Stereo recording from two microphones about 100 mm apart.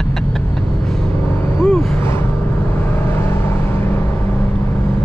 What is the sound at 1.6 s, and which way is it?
Vehicle, 5° left (ahead or behind).